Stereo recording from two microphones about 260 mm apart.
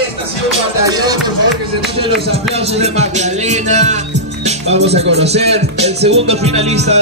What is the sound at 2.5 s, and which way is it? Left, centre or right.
Speech, right.